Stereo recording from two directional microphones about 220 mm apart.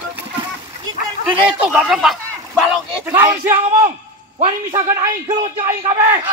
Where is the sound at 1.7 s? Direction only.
5° right (ahead or behind).